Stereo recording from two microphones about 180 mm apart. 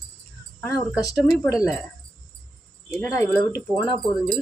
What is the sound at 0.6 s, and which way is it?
Speech, 10° left (ahead or behind).